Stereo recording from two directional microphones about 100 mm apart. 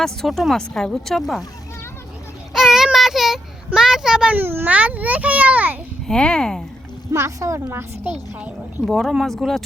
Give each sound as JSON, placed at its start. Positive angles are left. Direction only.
{"t": 0.0, "sound": "speech", "side_deg": 5}
{"t": 2.5, "sound": "child singing", "side_deg": 0}
{"t": 3.7, "sound": "a sound", "side_deg": -5}
{"t": 4.4, "sound": "a child's voice", "side_deg": -20}
{"t": 6.1, "sound": "speech", "side_deg": 10}
{"t": 7.1, "sound": "a woman's voice", "side_deg": -30}
{"t": 8.8, "sound": "speech", "side_deg": 0}